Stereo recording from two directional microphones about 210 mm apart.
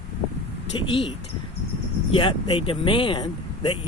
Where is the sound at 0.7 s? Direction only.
25° left (ahead or behind).